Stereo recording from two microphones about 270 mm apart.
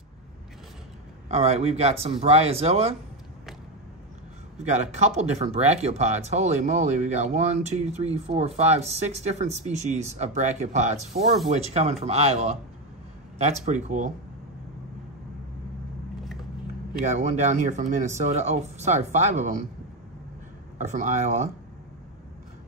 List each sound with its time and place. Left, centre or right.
1.3 s speech: right
4.6 s speech: right
17.0 s speech: right
20.7 s speech: right